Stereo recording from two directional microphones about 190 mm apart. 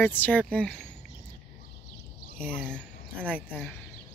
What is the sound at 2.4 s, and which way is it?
Speech, 5° left (ahead or behind).